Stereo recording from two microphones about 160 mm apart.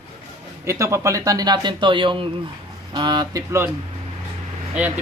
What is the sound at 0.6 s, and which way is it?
Speech, 20° right (ahead or behind).